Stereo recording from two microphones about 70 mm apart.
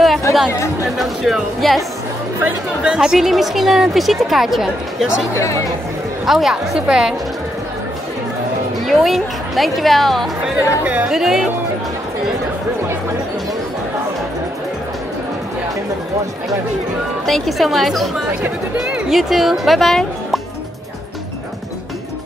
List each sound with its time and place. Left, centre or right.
0.5 s speech: left
0.9 s speech: centre
2.4 s speech: centre
5.3 s speech: left
6.2 s speech: centre
8.8 s speech: centre
10.4 s speech: centre
11.1 s speech: centre
17.3 s speech: centre